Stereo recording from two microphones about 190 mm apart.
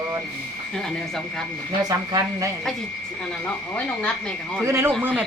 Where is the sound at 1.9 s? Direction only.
20° right (ahead or behind).